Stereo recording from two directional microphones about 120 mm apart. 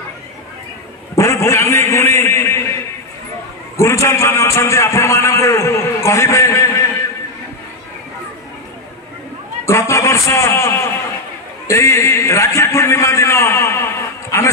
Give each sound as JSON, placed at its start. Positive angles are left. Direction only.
{"t": 1.1, "sound": "a sound", "side_deg": 25}
{"t": 3.7, "sound": "a man's voice", "side_deg": 25}
{"t": 9.7, "sound": "a man's voice", "side_deg": 25}